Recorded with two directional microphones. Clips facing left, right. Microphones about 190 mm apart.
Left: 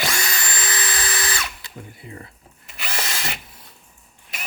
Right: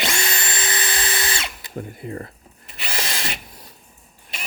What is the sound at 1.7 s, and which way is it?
Speech, 50° right (ahead or behind).